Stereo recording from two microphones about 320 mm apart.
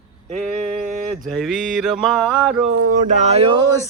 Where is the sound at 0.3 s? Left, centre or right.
Centre.